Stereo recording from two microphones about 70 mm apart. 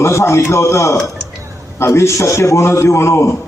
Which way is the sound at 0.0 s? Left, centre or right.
Left.